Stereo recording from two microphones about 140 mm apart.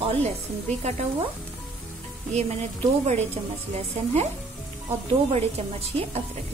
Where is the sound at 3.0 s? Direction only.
50° right (ahead or behind).